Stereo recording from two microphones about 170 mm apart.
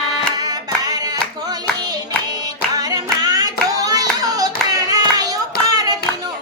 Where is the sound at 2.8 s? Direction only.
20° right (ahead or behind).